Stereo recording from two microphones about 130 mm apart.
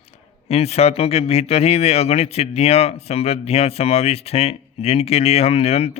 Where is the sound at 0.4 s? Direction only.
50° left (ahead or behind).